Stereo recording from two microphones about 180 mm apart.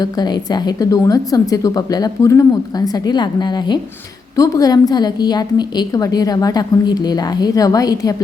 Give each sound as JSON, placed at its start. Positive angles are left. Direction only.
{"t": 0.0, "sound": "a woman's voice", "side_deg": 25}